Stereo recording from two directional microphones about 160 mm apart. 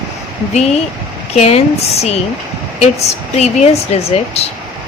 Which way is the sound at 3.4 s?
40° left (ahead or behind).